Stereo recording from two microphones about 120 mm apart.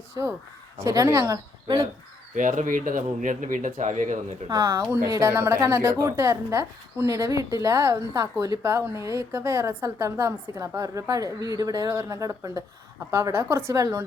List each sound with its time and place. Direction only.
0.2 s a woman's voice: 30° right (ahead or behind)
1.6 s speech: 35° right (ahead or behind)
2.3 s speech: 90° right
4.4 s a woman's voice: 30° right (ahead or behind)